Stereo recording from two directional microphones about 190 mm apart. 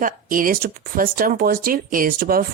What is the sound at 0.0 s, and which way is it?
Speech, 45° right (ahead or behind).